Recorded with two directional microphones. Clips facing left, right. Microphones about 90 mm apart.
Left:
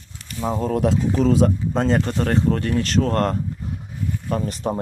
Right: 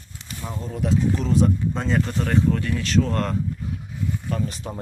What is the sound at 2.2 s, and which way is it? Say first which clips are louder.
Speech: left 2 dB; 50° left (ahead or behind).